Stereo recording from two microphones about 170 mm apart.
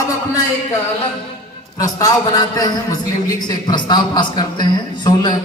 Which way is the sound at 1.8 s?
20° left (ahead or behind).